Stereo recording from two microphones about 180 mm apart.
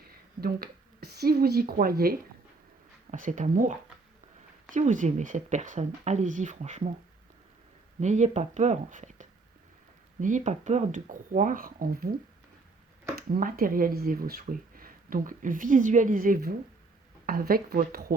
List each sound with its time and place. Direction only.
0.0 s speech: 60° right (ahead or behind)
3.1 s speech: 45° right (ahead or behind)
8.0 s speech: 40° right (ahead or behind)
13.1 s speech: 55° right (ahead or behind)